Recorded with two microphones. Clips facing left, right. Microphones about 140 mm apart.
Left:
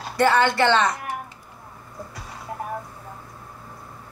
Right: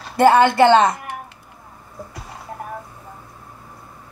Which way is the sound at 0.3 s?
50° right (ahead or behind).